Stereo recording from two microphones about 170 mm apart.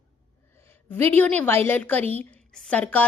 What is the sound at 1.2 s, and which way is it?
A woman's voice, 10° left (ahead or behind).